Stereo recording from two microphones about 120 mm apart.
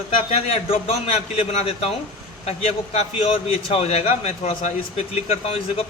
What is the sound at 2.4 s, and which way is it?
Speech, 65° left (ahead or behind).